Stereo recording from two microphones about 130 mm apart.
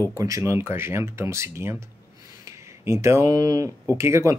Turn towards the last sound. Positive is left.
turn(degrees=-20)  # may be behind; listen again after turning